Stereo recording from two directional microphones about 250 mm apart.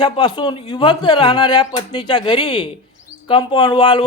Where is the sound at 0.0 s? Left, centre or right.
Centre.